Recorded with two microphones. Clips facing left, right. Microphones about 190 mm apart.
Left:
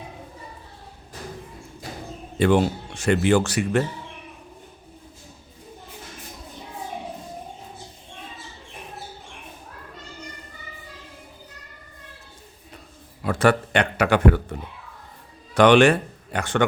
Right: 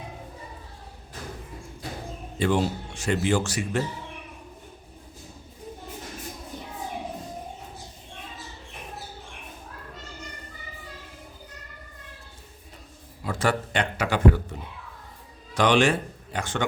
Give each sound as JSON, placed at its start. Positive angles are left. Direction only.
{"t": 2.4, "sound": "speech", "side_deg": 65}
{"t": 13.2, "sound": "speech", "side_deg": 65}
{"t": 15.5, "sound": "speech", "side_deg": 60}